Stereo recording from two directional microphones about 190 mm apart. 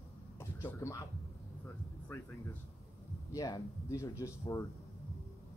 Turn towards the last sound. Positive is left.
turn(degrees=15)  # may be behind; listen again after turning